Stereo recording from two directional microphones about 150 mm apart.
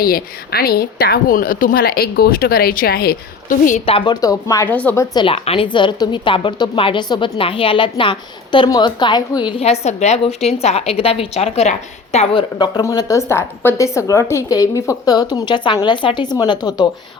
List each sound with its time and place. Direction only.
0.0 s a woman's voice: 80° left; by 3.8 s 60° left (ahead or behind)
3.8 s a woman's voice: 35° left (ahead or behind)
4.7 s a woman's voice: 10° left (ahead or behind)
5.1 s a woman's voice: 35° left (ahead or behind)
9.8 s a woman's voice: 50° left (ahead or behind); by 16.8 s 25° left (ahead or behind)